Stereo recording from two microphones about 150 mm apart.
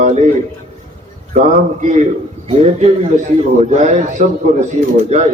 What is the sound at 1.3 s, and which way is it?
A man's voice, 55° right (ahead or behind).